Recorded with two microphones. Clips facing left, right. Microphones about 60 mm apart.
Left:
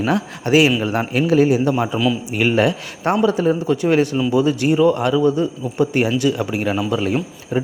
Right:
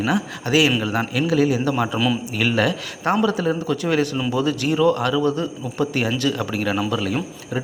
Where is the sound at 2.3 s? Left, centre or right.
Left.